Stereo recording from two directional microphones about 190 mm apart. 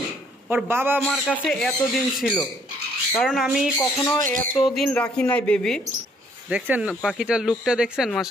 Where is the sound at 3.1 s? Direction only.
5° left (ahead or behind).